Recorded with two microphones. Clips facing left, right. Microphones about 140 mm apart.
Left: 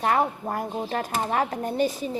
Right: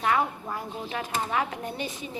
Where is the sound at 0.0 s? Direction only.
40° left (ahead or behind).